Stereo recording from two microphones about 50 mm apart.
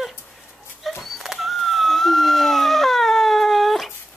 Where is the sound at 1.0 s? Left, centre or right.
Centre.